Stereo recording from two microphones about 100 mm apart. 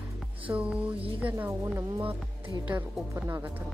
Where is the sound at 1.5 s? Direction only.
30° right (ahead or behind).